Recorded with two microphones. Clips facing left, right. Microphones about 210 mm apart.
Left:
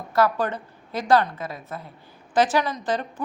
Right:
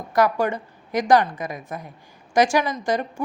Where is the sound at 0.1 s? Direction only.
15° right (ahead or behind).